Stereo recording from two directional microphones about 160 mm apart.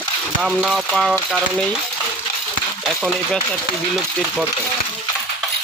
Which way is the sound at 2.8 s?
Centre (ahead or behind).